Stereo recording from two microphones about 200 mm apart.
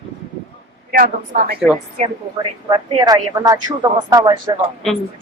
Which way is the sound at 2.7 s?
20° right (ahead or behind).